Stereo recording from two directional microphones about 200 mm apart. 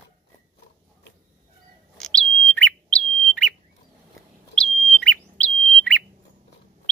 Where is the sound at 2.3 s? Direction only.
70° right (ahead or behind).